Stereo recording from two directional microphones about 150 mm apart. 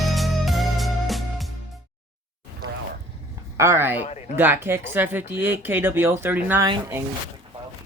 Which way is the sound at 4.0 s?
50° left (ahead or behind).